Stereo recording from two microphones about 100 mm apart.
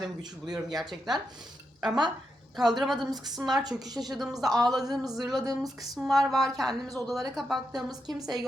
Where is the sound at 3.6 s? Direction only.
40° right (ahead or behind).